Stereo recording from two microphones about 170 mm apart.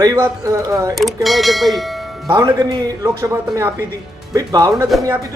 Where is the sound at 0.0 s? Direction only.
20° right (ahead or behind).